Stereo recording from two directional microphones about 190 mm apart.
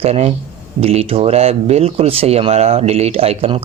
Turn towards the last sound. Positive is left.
turn(degrees=-30)  # may be behind; listen again after turning